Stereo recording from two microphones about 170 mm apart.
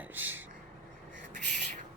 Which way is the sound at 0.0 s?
10° right (ahead or behind).